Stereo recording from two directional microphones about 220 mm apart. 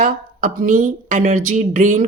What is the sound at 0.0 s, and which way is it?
Speech, 35° right (ahead or behind).